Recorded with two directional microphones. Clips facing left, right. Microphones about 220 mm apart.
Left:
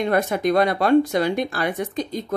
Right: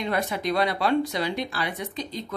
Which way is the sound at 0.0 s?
50° left (ahead or behind).